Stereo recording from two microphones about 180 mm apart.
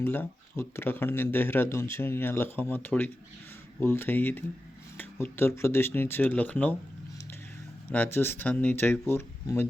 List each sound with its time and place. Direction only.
0.0 s speech: 10° left (ahead or behind)
7.9 s speech: 10° left (ahead or behind)